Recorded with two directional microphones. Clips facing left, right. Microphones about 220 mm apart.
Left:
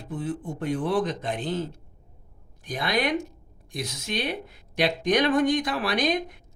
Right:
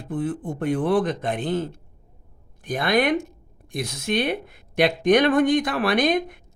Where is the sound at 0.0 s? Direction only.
55° right (ahead or behind).